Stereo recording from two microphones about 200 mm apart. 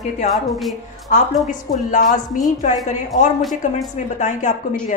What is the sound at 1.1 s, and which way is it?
A woman's voice, 40° left (ahead or behind).